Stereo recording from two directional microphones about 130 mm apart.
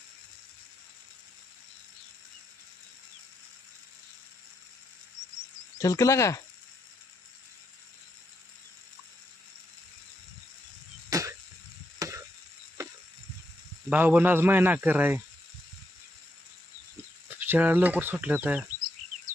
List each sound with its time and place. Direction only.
5.8 s cricket: 25° left (ahead or behind)
11.1 s a sound: 25° right (ahead or behind)
11.9 s chop: 25° right (ahead or behind)
13.9 s speech: 15° right (ahead or behind)
17.2 s speech: 15° right (ahead or behind)